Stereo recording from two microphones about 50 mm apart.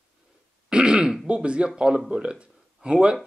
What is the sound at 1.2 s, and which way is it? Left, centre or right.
Speech, right.